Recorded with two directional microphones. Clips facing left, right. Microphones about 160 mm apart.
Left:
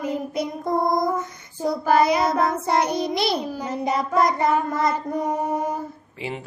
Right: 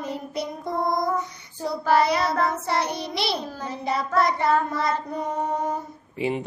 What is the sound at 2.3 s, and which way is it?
Child singing, 10° left (ahead or behind).